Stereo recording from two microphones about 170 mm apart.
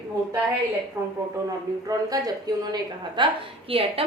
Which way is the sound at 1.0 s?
15° right (ahead or behind).